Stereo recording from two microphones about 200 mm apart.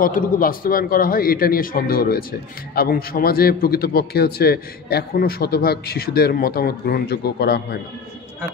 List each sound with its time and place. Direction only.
0.0 s a man's voice: 45° left (ahead or behind)